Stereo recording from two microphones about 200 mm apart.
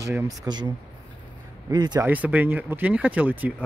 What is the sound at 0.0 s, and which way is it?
Speech, 15° right (ahead or behind).